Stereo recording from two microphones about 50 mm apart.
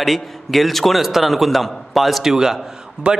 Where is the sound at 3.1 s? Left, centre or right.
Right.